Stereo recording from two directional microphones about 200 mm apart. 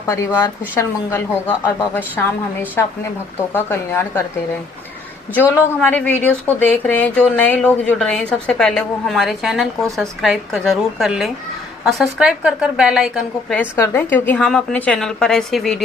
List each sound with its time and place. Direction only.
0.1 s a woman's voice: 15° left (ahead or behind)
5.3 s speech: 10° left (ahead or behind)
13.6 s speech: 15° left (ahead or behind)